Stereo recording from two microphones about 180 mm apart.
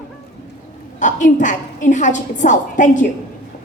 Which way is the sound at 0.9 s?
45° left (ahead or behind).